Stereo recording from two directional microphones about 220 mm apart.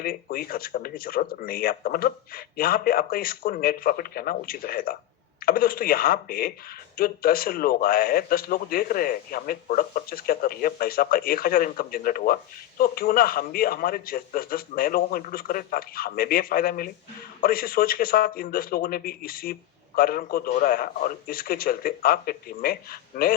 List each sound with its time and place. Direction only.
0.0 s a man's voice: 40° left (ahead or behind)